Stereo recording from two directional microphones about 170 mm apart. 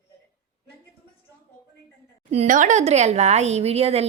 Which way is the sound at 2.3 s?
45° right (ahead or behind).